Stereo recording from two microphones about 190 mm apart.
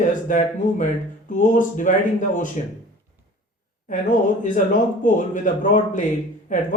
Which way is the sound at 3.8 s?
45° left (ahead or behind).